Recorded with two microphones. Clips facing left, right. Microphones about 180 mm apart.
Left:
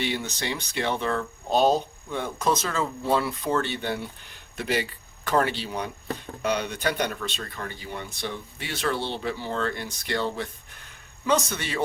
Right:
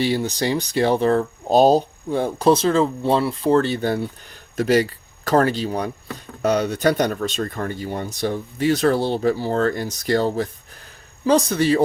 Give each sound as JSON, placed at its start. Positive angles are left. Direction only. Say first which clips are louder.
{"t": 0.0, "sound": "speech", "louder": "right 8 dB", "side_deg": -35}